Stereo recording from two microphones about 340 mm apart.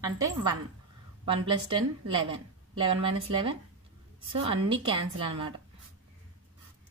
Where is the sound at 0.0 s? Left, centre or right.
Centre.